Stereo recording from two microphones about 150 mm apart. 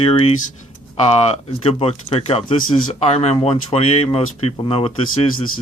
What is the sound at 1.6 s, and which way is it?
Speech, 40° left (ahead or behind).